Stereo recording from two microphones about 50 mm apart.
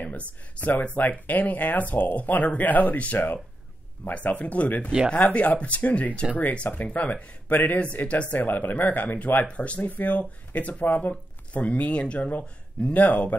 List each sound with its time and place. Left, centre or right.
0.6 s speech: left